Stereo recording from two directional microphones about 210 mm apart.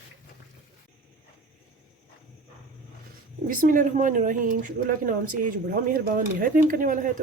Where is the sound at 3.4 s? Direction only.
40° right (ahead or behind).